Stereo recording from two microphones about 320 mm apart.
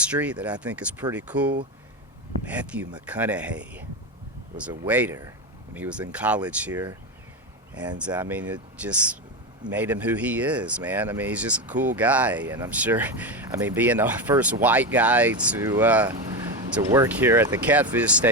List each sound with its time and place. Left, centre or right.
0.0 s speech: centre